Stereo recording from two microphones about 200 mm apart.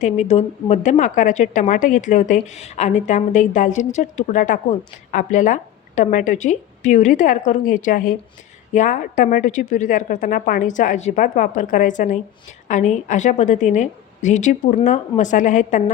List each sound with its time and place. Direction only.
0.0 s a woman's voice: 35° left (ahead or behind)